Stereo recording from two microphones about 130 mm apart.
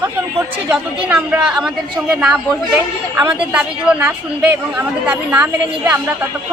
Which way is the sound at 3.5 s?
10° right (ahead or behind).